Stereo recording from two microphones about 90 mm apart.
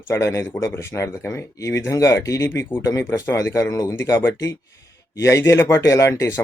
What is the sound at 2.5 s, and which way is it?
Speech, 25° left (ahead or behind).